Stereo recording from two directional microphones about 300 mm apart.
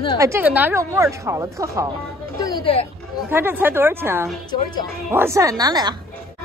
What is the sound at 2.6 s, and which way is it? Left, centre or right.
Speech, centre.